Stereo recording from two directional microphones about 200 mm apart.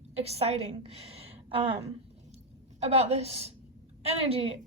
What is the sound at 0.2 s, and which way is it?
A woman's voice, 30° right (ahead or behind).